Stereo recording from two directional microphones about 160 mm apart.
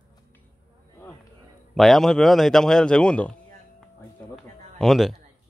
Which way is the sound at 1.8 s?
Centre (ahead or behind).